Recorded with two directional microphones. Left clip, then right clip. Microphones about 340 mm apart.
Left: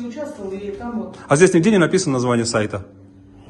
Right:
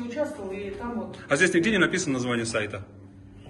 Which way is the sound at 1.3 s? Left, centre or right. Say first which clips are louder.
Left 8 dB; centre.